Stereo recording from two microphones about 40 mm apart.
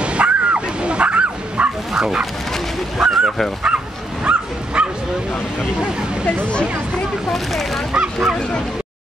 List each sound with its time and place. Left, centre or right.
0.0 s bow-wow: right
2.0 s speech: centre
3.0 s dog: centre
3.6 s bow-wow: right
7.2 s speech: centre
7.9 s speech: centre